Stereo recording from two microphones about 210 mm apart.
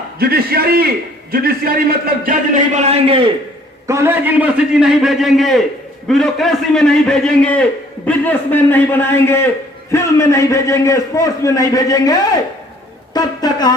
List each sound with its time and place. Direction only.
0.2 s a man's voice: 45° right (ahead or behind)
2.7 s a man's voice: 30° right (ahead or behind)
3.8 s a man's voice: 10° right (ahead or behind); by 12.1 s 15° left (ahead or behind)
13.1 s a sound: 20° left (ahead or behind)